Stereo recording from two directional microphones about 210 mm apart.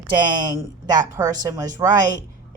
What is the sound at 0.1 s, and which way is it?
A woman's voice, 20° right (ahead or behind).